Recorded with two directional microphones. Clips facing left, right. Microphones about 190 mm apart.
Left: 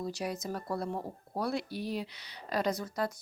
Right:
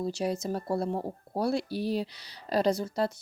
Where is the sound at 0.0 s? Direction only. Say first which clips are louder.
Right 6 dB; 25° right (ahead or behind).